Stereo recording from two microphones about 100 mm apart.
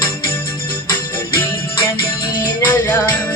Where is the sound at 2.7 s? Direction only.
20° left (ahead or behind).